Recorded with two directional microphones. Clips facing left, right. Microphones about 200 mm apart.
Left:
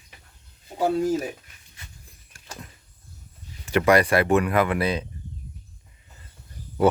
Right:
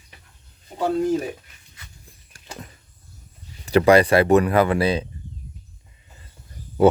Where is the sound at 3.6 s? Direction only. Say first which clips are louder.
Right 4 dB; 35° right (ahead or behind).